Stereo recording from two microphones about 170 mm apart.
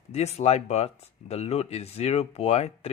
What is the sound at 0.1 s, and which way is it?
Speech, 40° left (ahead or behind).